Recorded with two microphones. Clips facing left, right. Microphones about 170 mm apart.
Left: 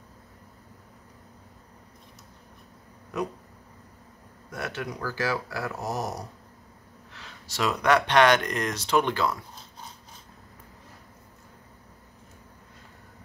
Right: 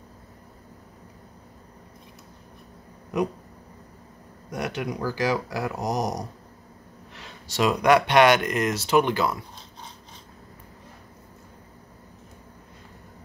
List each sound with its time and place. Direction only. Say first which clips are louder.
4.5 s speech: right 4 dB; 15° right (ahead or behind)